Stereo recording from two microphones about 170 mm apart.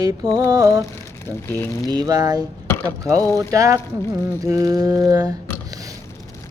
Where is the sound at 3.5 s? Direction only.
20° right (ahead or behind).